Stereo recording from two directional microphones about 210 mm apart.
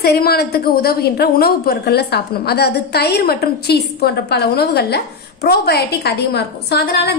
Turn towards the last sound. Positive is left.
turn(degrees=50)  # may be behind; listen again after turning